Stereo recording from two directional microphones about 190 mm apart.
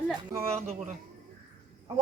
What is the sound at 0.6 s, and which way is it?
Speech, 35° right (ahead or behind).